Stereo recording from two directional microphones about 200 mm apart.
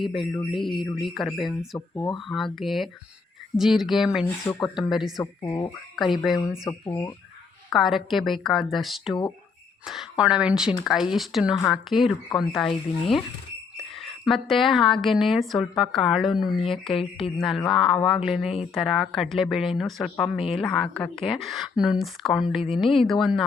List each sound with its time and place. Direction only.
0.0 s a woman's voice: centre (ahead or behind)
4.3 s speech: 15° left (ahead or behind)
4.8 s a woman's voice: centre (ahead or behind)
5.2 s speech: 20° left (ahead or behind)
6.0 s a woman's voice: centre (ahead or behind)
6.7 s speech: 15° left (ahead or behind)
7.7 s a woman's voice: centre (ahead or behind)
16.9 s speech: 25° left (ahead or behind)
17.3 s a woman's voice: centre (ahead or behind)